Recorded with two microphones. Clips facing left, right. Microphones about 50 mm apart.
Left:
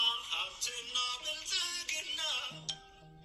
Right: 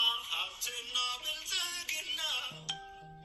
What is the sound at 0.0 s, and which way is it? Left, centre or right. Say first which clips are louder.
Music: right 1 dB; right.